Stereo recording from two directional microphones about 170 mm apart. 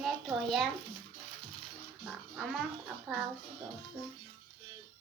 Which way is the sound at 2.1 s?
Centre (ahead or behind).